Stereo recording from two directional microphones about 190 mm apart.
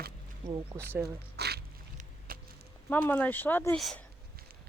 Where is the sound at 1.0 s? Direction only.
60° right (ahead or behind).